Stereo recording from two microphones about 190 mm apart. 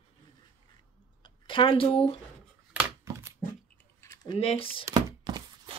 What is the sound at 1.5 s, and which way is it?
Speech, 25° left (ahead or behind).